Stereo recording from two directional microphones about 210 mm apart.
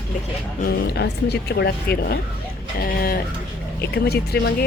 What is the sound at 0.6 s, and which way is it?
Speech, 50° left (ahead or behind).